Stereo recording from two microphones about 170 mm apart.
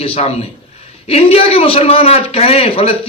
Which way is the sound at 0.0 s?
35° left (ahead or behind).